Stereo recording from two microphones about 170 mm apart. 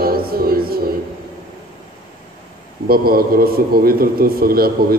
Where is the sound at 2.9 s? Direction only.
60° right (ahead or behind).